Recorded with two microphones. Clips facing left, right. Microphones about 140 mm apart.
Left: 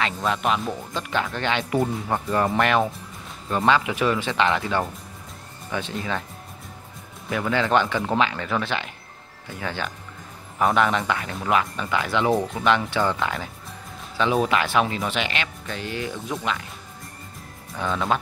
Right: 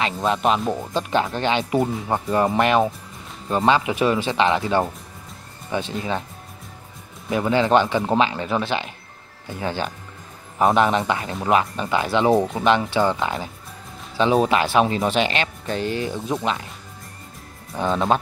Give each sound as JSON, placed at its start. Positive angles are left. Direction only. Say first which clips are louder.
{"t": 0.0, "sound": "speech", "louder": "right 3 dB", "side_deg": -25}
{"t": 1.8, "sound": "speech", "louder": "right 2 dB", "side_deg": 0}
{"t": 2.0, "sound": "speech", "louder": "right 3 dB", "side_deg": -20}
{"t": 7.2, "sound": "speech", "louder": "right 4 dB", "side_deg": -25}
{"t": 17.7, "sound": "speech", "louder": "right 4 dB", "side_deg": -25}